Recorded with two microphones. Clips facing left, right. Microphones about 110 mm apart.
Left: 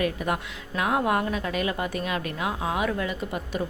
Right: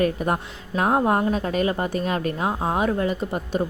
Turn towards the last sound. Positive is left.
turn(degrees=-35)  # may be behind; listen again after turning